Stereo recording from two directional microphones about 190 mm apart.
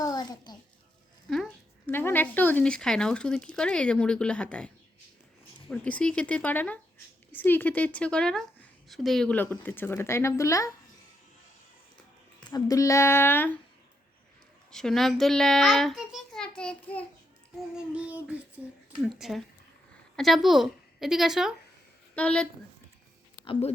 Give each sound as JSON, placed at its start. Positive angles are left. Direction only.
{"t": 0.0, "sound": "a sound", "side_deg": 20}
{"t": 1.9, "sound": "speech", "side_deg": 10}
{"t": 12.4, "sound": "speech", "side_deg": 20}
{"t": 14.7, "sound": "a child's voice", "side_deg": 0}
{"t": 17.7, "sound": "a woman's voice", "side_deg": -5}
{"t": 23.5, "sound": "speech", "side_deg": 35}